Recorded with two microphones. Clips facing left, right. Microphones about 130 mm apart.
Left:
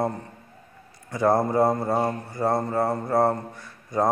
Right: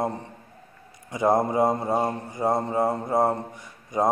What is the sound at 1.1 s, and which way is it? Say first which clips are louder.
Mantra: left 1 dB; 15° right (ahead or behind).